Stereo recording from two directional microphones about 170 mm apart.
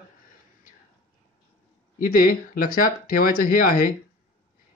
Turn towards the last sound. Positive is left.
turn(degrees=55)  # may be behind; listen again after turning